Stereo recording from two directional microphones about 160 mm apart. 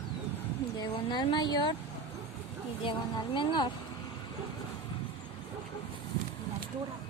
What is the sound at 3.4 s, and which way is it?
Speech, 30° left (ahead or behind).